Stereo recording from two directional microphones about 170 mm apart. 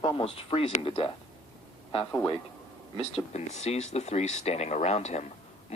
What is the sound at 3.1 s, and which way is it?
Speech, 40° left (ahead or behind).